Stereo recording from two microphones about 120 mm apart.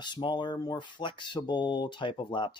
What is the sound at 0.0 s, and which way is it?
Speech, 40° left (ahead or behind).